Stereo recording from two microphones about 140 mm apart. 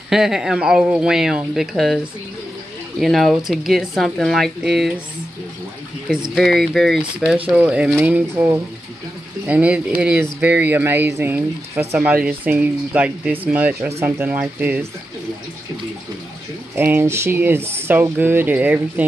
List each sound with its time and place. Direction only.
0.1 s speech: 5° right (ahead or behind)
3.0 s speech: centre (ahead or behind)
6.3 s speech: centre (ahead or behind); by 14.9 s 15° right (ahead or behind)
16.7 s speech: 15° right (ahead or behind)